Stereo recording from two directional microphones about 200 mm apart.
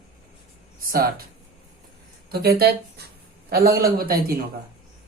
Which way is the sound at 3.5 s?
50° right (ahead or behind).